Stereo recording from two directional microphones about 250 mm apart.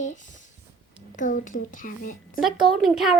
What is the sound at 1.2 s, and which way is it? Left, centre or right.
Speech, left.